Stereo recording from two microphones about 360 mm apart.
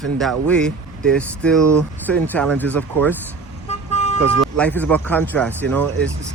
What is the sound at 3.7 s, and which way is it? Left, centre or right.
Vehicle, centre.